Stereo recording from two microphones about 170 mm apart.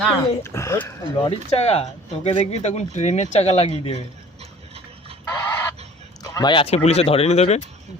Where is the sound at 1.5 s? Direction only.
35° left (ahead or behind).